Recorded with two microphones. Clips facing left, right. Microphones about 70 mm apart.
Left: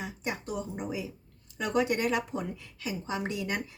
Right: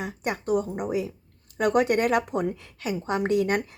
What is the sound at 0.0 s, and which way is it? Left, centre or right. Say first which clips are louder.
A woman's voice: right 6 dB; right.